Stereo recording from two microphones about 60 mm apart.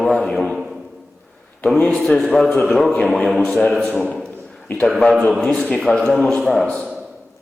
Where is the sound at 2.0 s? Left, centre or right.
Centre.